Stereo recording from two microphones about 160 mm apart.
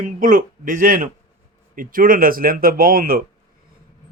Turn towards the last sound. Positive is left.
turn(degrees=-65)  # may be behind; listen again after turning